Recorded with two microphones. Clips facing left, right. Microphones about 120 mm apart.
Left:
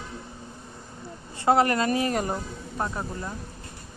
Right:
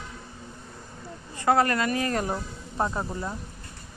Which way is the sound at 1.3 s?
25° left (ahead or behind).